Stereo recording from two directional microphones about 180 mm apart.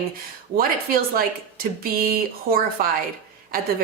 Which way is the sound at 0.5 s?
55° right (ahead or behind).